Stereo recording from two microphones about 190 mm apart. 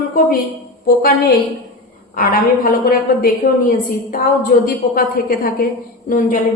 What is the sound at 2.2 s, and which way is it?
A woman's voice, 50° left (ahead or behind).